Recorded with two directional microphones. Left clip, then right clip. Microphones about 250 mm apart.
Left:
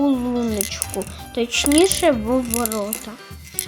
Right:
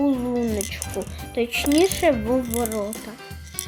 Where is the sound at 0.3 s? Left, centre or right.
Centre.